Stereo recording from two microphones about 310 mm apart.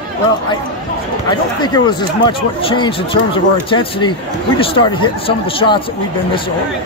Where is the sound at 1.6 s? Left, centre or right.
Centre.